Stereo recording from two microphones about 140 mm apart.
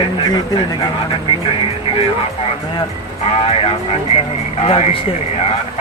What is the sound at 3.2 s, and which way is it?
Speech, 45° left (ahead or behind).